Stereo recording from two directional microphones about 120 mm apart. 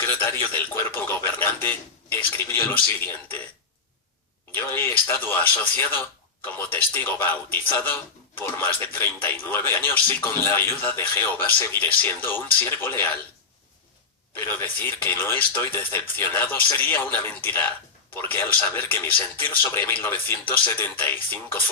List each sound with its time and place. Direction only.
0.0 s a sound: 15° left (ahead or behind)
4.5 s speech: 20° left (ahead or behind)
14.3 s speech: 20° left (ahead or behind)